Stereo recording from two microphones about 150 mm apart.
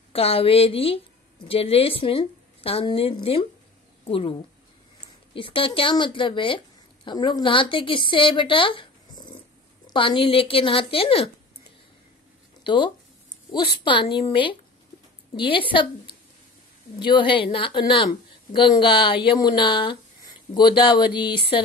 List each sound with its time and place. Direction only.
0.1 s a woman's voice: 40° left (ahead or behind)
12.6 s a woman's voice: 35° left (ahead or behind)